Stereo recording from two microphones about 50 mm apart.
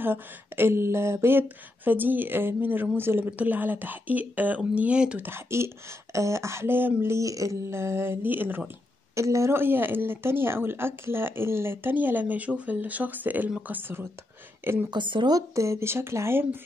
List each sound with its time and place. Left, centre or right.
0.0 s speech: right
1.9 s speech: right
3.3 s speech: right
5.2 s speech: right
6.1 s speech: right
9.1 s a woman's voice: right
9.5 s a woman's voice: right
15.5 s speech: right